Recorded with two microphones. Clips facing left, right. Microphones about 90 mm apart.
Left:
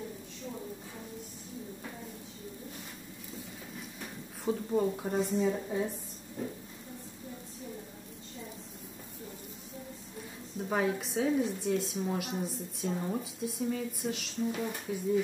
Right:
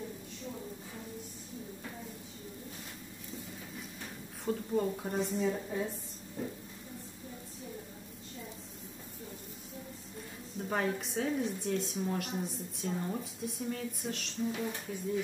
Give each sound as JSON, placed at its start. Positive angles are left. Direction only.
{"t": 4.0, "sound": "a woman's voice", "side_deg": 5}
{"t": 10.6, "sound": "a woman's voice", "side_deg": 5}